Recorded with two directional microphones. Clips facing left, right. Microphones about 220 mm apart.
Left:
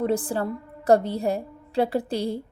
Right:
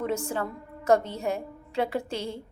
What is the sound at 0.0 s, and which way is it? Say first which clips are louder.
A woman's voice: left 5 dB; 35° left (ahead or behind).